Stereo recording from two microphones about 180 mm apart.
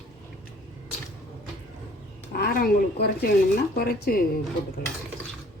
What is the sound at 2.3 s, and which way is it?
Speech, 55° left (ahead or behind).